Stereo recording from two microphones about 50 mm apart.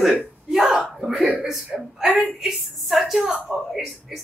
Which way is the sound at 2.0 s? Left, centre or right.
Right.